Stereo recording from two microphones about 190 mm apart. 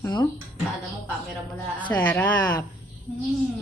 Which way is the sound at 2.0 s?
10° left (ahead or behind).